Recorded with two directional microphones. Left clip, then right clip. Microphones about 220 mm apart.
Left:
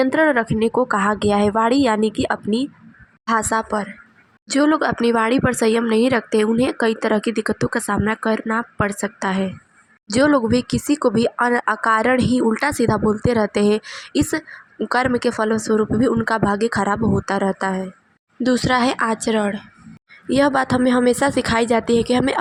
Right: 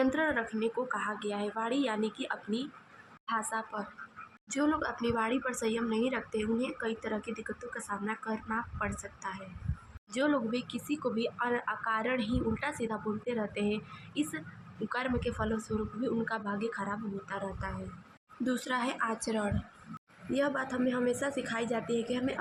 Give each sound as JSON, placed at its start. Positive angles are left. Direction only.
{"t": 0.0, "sound": "speech", "side_deg": 35}